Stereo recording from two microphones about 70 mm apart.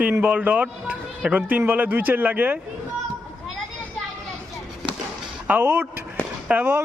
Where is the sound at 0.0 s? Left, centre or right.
Centre.